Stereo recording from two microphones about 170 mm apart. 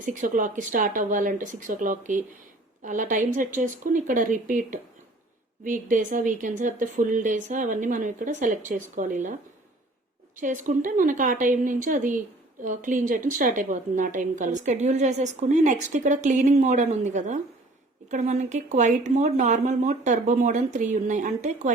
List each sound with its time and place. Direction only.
0.0 s a woman's voice: 50° right (ahead or behind)
10.3 s a woman's voice: 50° right (ahead or behind)